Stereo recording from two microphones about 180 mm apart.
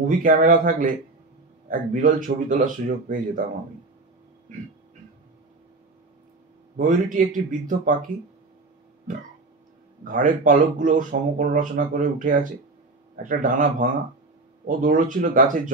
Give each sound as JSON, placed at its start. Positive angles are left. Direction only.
{"t": 0.2, "sound": "speech", "side_deg": -45}
{"t": 6.9, "sound": "speech", "side_deg": -45}
{"t": 9.1, "sound": "speech", "side_deg": -45}